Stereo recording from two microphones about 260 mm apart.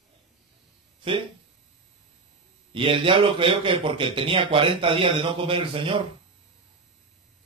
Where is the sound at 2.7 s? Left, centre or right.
Centre.